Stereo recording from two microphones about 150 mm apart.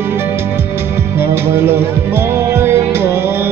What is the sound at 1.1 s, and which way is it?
Music, 15° right (ahead or behind).